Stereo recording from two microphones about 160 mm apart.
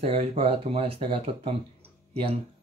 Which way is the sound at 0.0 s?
40° right (ahead or behind).